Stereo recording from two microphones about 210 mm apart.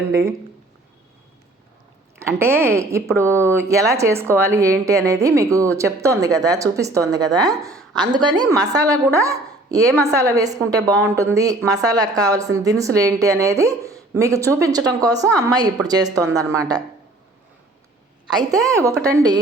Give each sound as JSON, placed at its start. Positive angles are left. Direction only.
{"t": 2.1, "sound": "a woman's voice", "side_deg": -10}
{"t": 18.3, "sound": "a woman's voice", "side_deg": -15}